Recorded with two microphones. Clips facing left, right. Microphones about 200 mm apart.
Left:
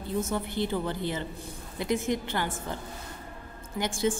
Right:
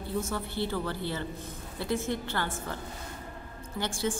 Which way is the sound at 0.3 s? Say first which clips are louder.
Left 3 dB; 20° left (ahead or behind).